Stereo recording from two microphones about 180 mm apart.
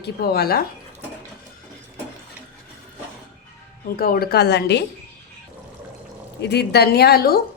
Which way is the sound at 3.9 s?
55° left (ahead or behind).